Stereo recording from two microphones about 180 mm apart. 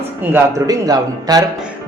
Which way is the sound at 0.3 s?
20° right (ahead or behind).